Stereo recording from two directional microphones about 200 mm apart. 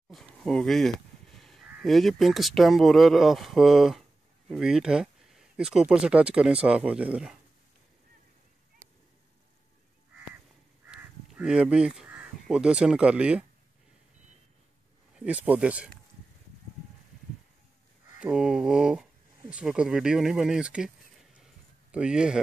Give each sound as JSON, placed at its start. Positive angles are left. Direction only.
{"t": 0.1, "sound": "speech", "side_deg": 0}
{"t": 10.9, "sound": "speech", "side_deg": -5}
{"t": 15.1, "sound": "speech", "side_deg": -5}
{"t": 18.2, "sound": "speech", "side_deg": -5}
{"t": 21.9, "sound": "speech", "side_deg": -5}